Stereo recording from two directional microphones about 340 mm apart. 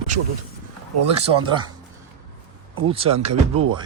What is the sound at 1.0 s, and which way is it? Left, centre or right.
Speech, centre.